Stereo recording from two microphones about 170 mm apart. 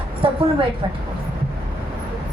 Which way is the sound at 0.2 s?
30° right (ahead or behind).